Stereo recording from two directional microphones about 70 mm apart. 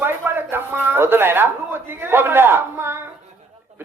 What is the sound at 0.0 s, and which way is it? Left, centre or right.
A man's voice, right.